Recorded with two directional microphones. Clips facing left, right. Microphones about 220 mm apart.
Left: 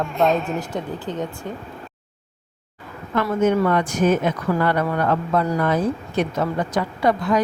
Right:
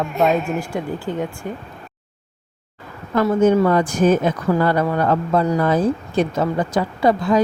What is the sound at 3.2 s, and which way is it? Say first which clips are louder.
Speech: right 4 dB; 35° right (ahead or behind).